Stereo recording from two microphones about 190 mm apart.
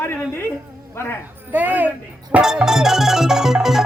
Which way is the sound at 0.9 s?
10° left (ahead or behind).